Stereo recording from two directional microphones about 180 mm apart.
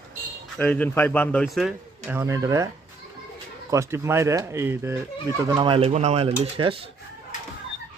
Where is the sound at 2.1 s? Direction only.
15° right (ahead or behind).